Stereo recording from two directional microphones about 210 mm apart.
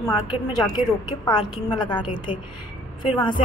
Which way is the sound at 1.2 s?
20° left (ahead or behind).